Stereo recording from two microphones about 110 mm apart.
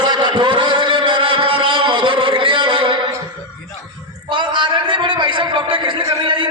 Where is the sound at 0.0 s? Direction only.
45° right (ahead or behind).